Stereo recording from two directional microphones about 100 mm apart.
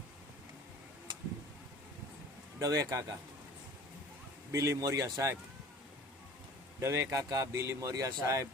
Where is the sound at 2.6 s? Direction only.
35° right (ahead or behind).